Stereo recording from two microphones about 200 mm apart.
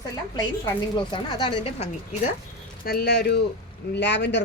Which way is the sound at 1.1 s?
25° left (ahead or behind).